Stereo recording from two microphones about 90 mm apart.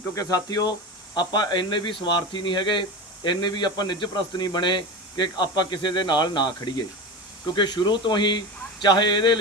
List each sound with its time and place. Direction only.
0.1 s a man's voice: 40° left (ahead or behind); by 9.4 s 60° left (ahead or behind)